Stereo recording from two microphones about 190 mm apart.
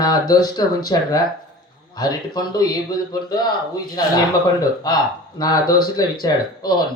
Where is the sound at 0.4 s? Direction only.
20° left (ahead or behind).